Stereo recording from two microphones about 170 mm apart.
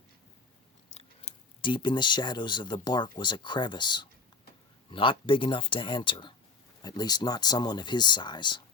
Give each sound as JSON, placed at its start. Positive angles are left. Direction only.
{"t": 0.9, "sound": "chewing", "side_deg": 40}
{"t": 1.7, "sound": "speech", "side_deg": 25}